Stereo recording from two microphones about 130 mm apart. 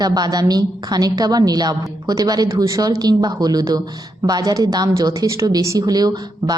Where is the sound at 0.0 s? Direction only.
30° right (ahead or behind).